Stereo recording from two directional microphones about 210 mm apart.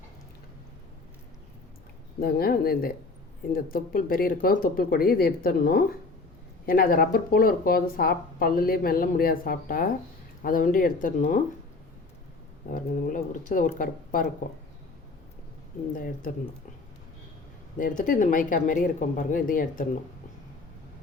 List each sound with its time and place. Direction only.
2.1 s speech: 45° left (ahead or behind)
12.7 s speech: 40° left (ahead or behind)
16.0 s speech: 40° left (ahead or behind)
17.7 s speech: 40° left (ahead or behind)